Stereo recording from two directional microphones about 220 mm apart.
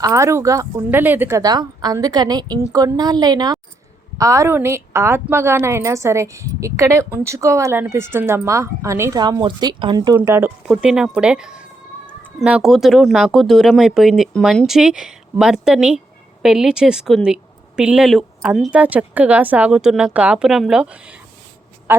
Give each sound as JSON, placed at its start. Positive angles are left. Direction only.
{"t": 0.0, "sound": "speech", "side_deg": -15}